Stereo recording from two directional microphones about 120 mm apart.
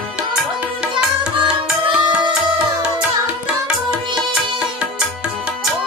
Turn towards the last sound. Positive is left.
turn(degrees=-10)  # may be behind; listen again after turning